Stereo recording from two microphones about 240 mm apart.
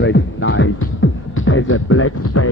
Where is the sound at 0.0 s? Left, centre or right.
Left.